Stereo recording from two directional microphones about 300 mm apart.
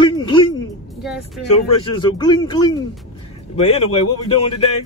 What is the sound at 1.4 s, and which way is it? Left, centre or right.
Speech, centre.